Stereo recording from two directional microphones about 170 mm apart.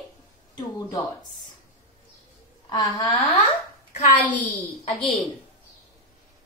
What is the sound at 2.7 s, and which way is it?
Speech, 20° left (ahead or behind).